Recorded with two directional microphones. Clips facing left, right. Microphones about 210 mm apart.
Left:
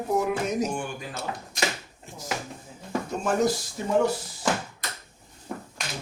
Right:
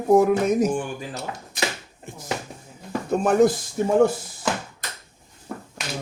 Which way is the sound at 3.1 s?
55° right (ahead or behind).